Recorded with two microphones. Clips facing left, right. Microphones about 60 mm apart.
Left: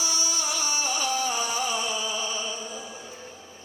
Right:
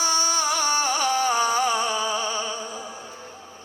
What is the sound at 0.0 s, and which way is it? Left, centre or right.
Music, right.